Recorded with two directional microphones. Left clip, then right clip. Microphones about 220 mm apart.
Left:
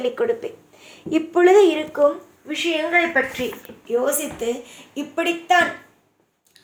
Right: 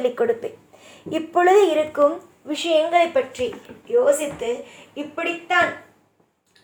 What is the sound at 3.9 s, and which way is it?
A woman's voice, 40° left (ahead or behind).